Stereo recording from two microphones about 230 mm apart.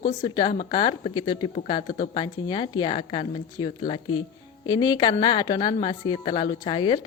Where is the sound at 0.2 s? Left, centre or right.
Centre.